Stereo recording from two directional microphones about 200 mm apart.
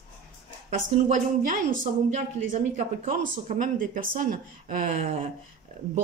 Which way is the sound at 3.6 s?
45° right (ahead or behind).